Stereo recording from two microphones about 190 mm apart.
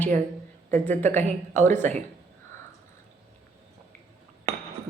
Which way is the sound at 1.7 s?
40° right (ahead or behind).